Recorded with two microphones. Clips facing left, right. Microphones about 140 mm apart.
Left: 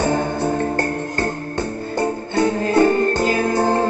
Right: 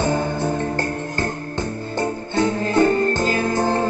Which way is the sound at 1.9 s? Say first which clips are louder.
Left 2 dB; 15° left (ahead or behind).